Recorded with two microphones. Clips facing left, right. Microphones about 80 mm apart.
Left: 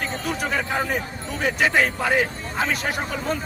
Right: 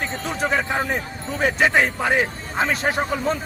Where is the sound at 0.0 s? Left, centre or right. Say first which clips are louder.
Right 2 dB; right.